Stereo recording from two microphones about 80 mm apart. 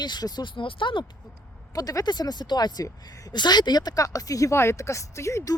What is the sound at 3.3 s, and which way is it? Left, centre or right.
Speech, left.